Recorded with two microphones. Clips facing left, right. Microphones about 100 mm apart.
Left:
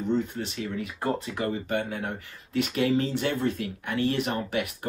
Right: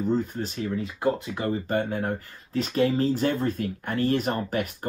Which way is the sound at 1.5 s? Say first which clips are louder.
Right 6 dB; 35° right (ahead or behind).